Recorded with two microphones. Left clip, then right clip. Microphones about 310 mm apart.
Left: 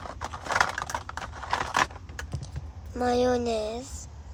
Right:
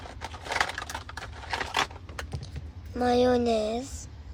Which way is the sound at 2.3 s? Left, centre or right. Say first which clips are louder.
Even; centre.